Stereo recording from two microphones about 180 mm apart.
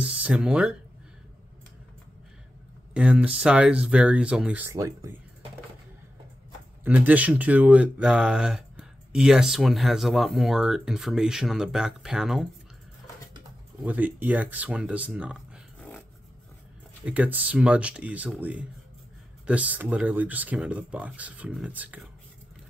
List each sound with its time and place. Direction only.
0.0 s speech: 5° right (ahead or behind)
2.9 s speech: 5° right (ahead or behind)
6.8 s speech: 10° right (ahead or behind)
13.8 s speech: 10° right (ahead or behind)
17.0 s speech: 10° right (ahead or behind)